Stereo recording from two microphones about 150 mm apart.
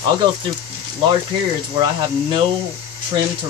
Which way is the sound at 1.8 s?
30° right (ahead or behind).